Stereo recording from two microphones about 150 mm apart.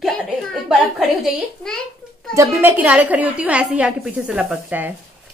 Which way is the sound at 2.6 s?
10° right (ahead or behind).